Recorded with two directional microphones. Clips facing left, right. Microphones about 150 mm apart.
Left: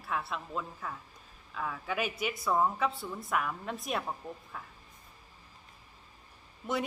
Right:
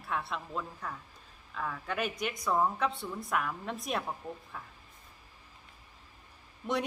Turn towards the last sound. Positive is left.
turn(degrees=0)  # may be behind; listen again after turning